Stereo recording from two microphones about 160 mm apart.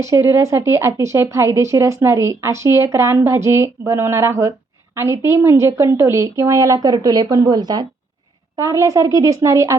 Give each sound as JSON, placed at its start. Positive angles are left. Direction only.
{"t": 0.0, "sound": "a woman's voice", "side_deg": -15}